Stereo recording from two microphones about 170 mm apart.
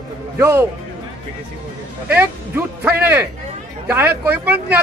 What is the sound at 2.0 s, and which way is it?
A man's voice, 10° right (ahead or behind).